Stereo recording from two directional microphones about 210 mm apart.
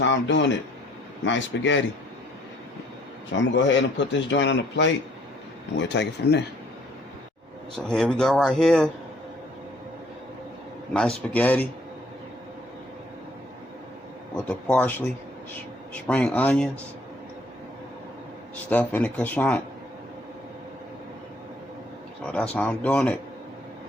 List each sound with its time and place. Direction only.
0.0 s a man's voice: 60° left (ahead or behind)
3.5 s a man's voice: 60° left (ahead or behind)
7.9 s speech: 5° left (ahead or behind)
10.9 s speech: 5° left (ahead or behind)
14.4 s speech: 5° left (ahead or behind)
18.5 s speech: 5° left (ahead or behind)
22.3 s speech: 5° left (ahead or behind)